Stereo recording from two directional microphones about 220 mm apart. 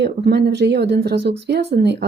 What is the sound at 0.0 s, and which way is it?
Speech, 50° right (ahead or behind).